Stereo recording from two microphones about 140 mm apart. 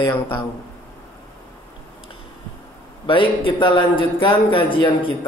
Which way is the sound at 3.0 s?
35° left (ahead or behind).